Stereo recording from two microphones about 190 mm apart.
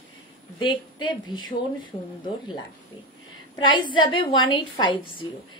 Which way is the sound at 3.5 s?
25° left (ahead or behind).